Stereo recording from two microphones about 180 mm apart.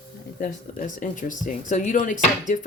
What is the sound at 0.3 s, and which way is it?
Speech, 50° left (ahead or behind).